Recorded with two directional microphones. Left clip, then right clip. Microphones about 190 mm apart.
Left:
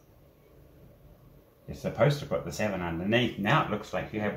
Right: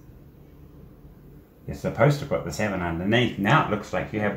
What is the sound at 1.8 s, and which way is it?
Speech, 20° right (ahead or behind).